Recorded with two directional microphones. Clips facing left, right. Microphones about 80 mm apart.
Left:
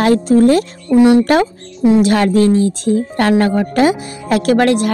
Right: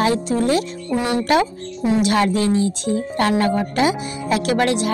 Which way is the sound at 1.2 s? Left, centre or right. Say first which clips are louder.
Left 4 dB; left.